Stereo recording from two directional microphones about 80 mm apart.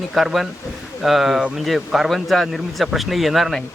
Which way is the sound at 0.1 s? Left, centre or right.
Centre.